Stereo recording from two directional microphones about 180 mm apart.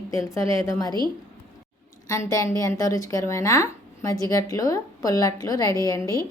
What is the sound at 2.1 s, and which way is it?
A woman's voice, 20° left (ahead or behind).